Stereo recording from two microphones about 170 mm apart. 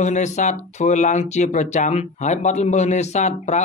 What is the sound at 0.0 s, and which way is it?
Speech, 45° left (ahead or behind).